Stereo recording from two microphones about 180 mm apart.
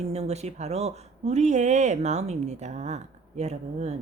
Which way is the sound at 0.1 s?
35° right (ahead or behind).